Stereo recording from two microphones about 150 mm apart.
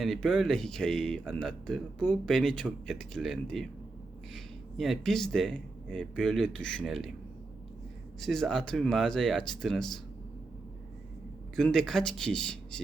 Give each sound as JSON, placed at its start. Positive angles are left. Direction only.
{"t": 0.0, "sound": "speech", "side_deg": 5}
{"t": 8.2, "sound": "speech", "side_deg": 5}
{"t": 11.5, "sound": "speech", "side_deg": 5}